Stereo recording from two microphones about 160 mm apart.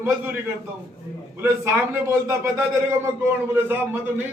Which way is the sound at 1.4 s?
15° right (ahead or behind).